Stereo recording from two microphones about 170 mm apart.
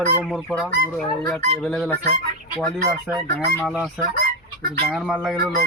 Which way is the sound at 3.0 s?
15° right (ahead or behind).